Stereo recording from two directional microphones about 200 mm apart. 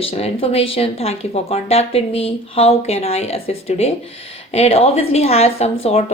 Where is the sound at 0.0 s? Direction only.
30° left (ahead or behind).